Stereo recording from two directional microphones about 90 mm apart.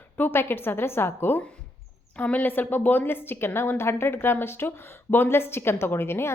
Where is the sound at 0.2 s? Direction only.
25° left (ahead or behind).